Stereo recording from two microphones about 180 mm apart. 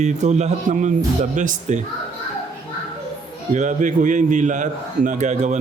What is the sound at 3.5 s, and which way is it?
A man's voice, 45° right (ahead or behind).